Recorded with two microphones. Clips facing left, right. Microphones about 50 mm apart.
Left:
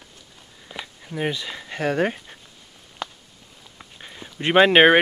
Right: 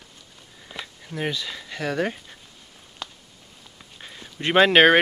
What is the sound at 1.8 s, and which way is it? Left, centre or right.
Speech, left.